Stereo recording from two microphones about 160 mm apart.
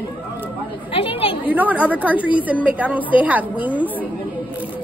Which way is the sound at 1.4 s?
10° right (ahead or behind).